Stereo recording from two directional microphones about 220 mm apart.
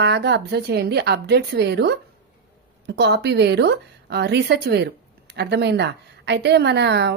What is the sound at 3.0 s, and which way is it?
A woman's voice, 50° right (ahead or behind).